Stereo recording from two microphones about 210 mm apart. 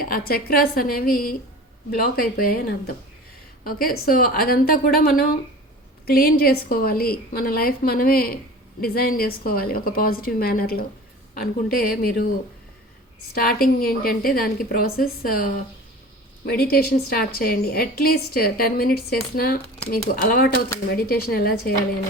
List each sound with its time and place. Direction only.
0.0 s a woman's voice: 45° left (ahead or behind)
13.3 s a woman's voice: 45° left (ahead or behind)